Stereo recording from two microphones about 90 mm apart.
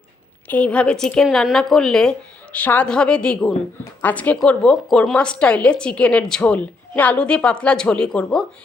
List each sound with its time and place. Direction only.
0.4 s a woman's voice: 15° left (ahead or behind)
2.6 s a woman's voice: 15° left (ahead or behind)